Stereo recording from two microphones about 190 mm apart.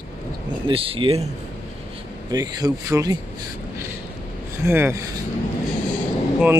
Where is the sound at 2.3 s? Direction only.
20° right (ahead or behind).